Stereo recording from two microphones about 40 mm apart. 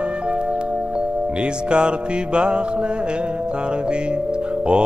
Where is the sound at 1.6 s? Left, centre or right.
Right.